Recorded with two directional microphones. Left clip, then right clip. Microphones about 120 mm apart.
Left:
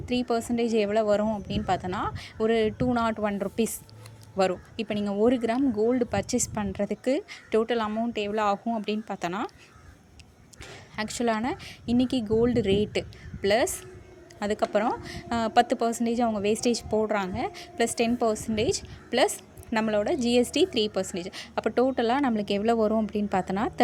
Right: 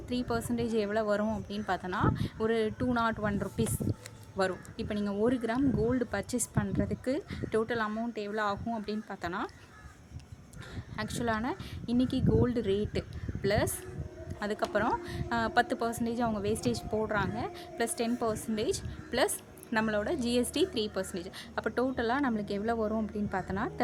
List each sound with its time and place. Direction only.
0.1 s a woman's voice: 35° left (ahead or behind)
10.9 s a woman's voice: 35° left (ahead or behind)